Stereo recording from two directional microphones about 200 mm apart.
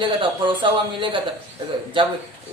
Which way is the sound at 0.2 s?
25° right (ahead or behind).